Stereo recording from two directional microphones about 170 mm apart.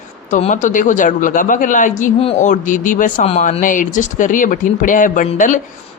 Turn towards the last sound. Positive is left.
turn(degrees=50)  # may be behind; listen again after turning